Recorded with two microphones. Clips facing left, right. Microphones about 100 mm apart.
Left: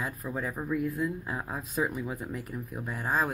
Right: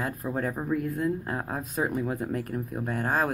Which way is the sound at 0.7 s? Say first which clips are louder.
Right 1 dB; 45° right (ahead or behind).